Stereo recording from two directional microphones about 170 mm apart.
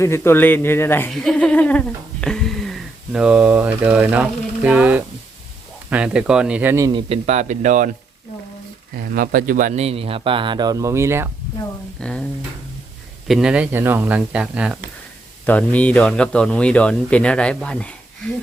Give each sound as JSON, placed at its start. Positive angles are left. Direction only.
{"t": 0.0, "sound": "speech", "side_deg": 15}
{"t": 1.1, "sound": "speech", "side_deg": 5}
{"t": 7.1, "sound": "speech", "side_deg": -40}
{"t": 9.0, "sound": "speech", "side_deg": -55}
{"t": 11.9, "sound": "speech", "side_deg": 5}
{"t": 15.4, "sound": "speech", "side_deg": 10}